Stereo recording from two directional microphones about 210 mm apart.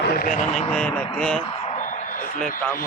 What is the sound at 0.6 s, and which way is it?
Speech, 5° left (ahead or behind).